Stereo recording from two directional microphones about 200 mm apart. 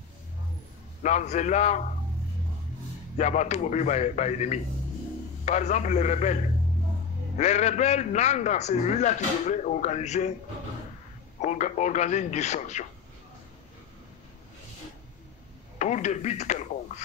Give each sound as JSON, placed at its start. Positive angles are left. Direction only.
{"t": 1.0, "sound": "a man's voice", "side_deg": 35}
{"t": 3.2, "sound": "a man's voice", "side_deg": 35}
{"t": 7.3, "sound": "a man's voice", "side_deg": 35}
{"t": 11.4, "sound": "a man's voice", "side_deg": 35}
{"t": 15.8, "sound": "a man's voice", "side_deg": 35}